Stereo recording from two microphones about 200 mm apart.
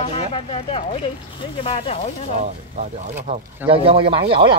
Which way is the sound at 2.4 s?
40° right (ahead or behind).